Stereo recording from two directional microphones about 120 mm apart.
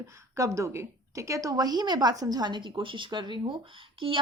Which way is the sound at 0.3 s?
25° right (ahead or behind).